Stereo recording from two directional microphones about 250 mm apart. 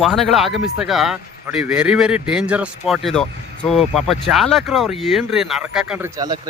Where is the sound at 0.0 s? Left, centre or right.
Centre.